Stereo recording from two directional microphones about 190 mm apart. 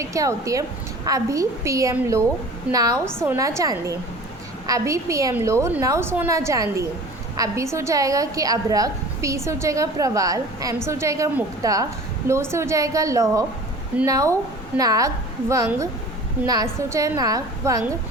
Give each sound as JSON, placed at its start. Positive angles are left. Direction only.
{"t": 0.0, "sound": "a woman's voice", "side_deg": -15}